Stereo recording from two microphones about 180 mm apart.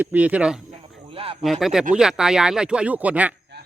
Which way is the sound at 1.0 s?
30° right (ahead or behind).